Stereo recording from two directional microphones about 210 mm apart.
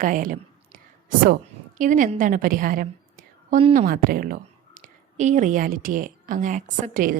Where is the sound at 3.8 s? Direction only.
45° right (ahead or behind).